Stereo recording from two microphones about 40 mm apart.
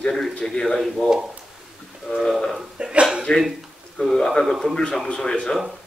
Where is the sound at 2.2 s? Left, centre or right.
Centre.